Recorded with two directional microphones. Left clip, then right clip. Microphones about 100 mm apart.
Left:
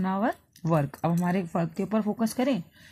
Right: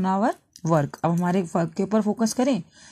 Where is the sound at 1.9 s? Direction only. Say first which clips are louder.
Right 5 dB; 30° right (ahead or behind).